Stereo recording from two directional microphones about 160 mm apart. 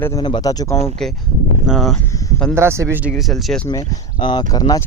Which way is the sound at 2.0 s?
20° left (ahead or behind).